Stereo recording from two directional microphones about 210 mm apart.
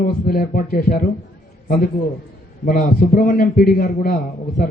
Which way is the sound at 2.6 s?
40° left (ahead or behind).